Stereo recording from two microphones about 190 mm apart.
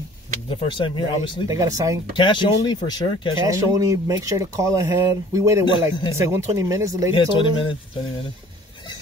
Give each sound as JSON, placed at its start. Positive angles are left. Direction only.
{"t": 0.5, "sound": "speech", "side_deg": 25}
{"t": 1.5, "sound": "speech", "side_deg": -20}
{"t": 2.1, "sound": "speech", "side_deg": 25}
{"t": 3.4, "sound": "speech", "side_deg": -15}
{"t": 5.7, "sound": "speech", "side_deg": 25}
{"t": 6.1, "sound": "speech", "side_deg": -15}
{"t": 7.2, "sound": "speech", "side_deg": 25}